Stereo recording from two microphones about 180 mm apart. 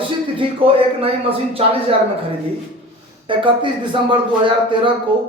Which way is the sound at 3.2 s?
30° right (ahead or behind).